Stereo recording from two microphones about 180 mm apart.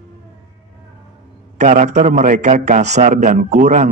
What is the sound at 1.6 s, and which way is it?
Speech, 40° right (ahead or behind).